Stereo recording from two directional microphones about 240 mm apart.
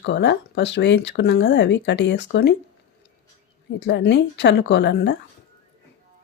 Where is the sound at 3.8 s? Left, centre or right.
Left.